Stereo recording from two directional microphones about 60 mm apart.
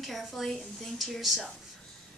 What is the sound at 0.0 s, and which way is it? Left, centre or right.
Speech, centre.